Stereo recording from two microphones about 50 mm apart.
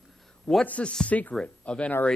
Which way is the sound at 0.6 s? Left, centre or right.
Left.